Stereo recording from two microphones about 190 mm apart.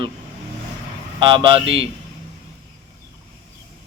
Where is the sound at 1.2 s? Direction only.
25° right (ahead or behind).